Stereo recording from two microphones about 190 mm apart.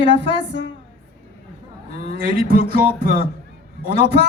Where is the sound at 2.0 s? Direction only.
50° right (ahead or behind).